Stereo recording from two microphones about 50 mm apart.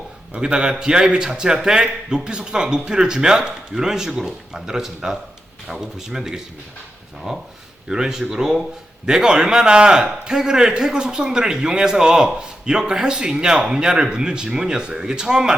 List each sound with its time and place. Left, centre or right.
0.3 s a man's voice: centre